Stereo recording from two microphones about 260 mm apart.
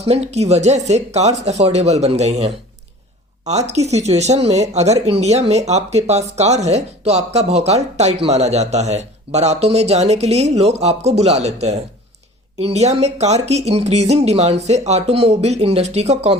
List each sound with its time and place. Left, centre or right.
0.0 s speech: right